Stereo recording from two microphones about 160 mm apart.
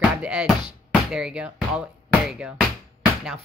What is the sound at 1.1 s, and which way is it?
Speech, 5° right (ahead or behind).